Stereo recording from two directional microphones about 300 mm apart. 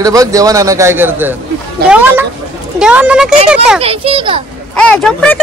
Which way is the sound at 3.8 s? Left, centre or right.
Centre.